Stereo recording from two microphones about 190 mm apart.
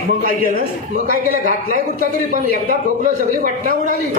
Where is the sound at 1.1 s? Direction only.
45° right (ahead or behind).